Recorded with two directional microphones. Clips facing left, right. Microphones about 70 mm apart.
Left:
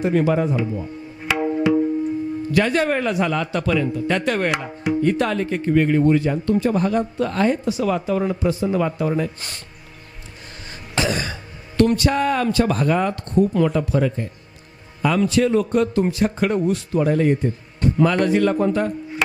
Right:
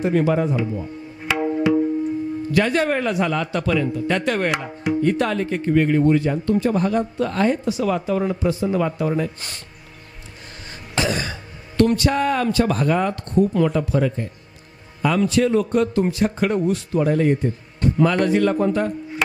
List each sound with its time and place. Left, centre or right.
0.0 s speech: left
1.4 s tabla: left
2.5 s a man's voice: centre
10.7 s throat clearing: centre
11.8 s a man's voice: centre